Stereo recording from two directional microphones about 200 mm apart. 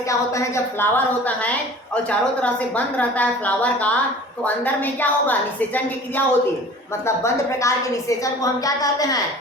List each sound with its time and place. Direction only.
0.1 s a woman's voice: 15° left (ahead or behind)